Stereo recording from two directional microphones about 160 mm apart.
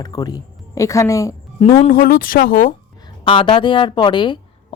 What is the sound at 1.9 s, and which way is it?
Speech, 65° left (ahead or behind).